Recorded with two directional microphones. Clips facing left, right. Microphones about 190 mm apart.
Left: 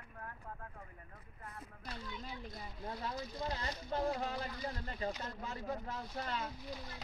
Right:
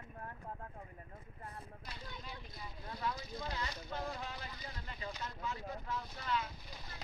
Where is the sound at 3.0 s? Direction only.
35° left (ahead or behind).